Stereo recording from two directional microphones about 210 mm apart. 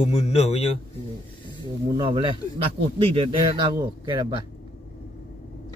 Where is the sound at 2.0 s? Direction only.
25° right (ahead or behind).